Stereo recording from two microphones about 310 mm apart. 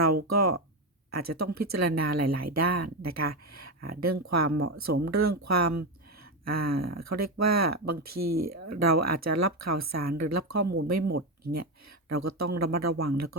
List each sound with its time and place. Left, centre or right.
0.3 s speech: right